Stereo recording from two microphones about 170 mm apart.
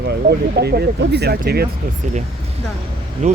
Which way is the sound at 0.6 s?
70° right (ahead or behind).